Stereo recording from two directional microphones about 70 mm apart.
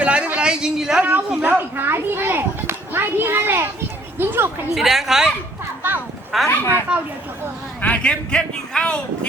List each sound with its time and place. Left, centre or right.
0.0 s a sound: centre
1.0 s a child's voice: centre
4.7 s a woman's voice: centre
6.5 s speech: left
7.8 s a man's voice: centre